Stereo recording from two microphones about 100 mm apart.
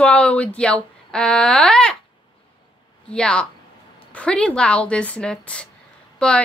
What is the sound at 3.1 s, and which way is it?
A woman's voice, 10° left (ahead or behind).